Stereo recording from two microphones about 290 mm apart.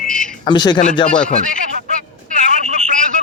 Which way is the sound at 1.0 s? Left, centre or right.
Centre.